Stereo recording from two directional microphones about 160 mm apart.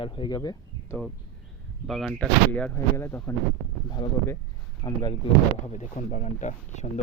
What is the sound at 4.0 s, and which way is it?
Speech, 30° left (ahead or behind).